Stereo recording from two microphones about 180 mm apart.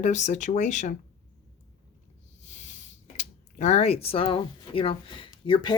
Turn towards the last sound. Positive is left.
turn(degrees=25)  # may be behind; listen again after turning